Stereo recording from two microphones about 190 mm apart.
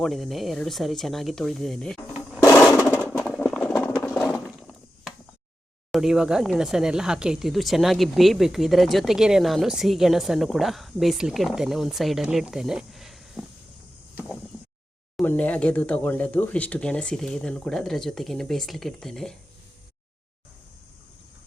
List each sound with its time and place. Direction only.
0.0 s speech: centre (ahead or behind)
2.4 s a sound: 15° left (ahead or behind)
4.4 s chop: centre (ahead or behind)
5.9 s speech: 5° right (ahead or behind)
15.1 s speech: 10° left (ahead or behind)